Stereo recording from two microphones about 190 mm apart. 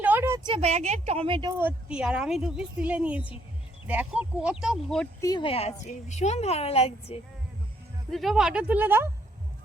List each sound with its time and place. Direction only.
0.0 s speech: 10° right (ahead or behind); by 1.5 s 25° right (ahead or behind)
1.5 s a woman's voice: 10° right (ahead or behind)
5.2 s a woman's voice: 25° left (ahead or behind)
8.1 s a woman's voice: centre (ahead or behind)